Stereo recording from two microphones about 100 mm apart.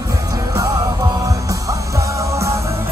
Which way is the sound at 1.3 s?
35° right (ahead or behind).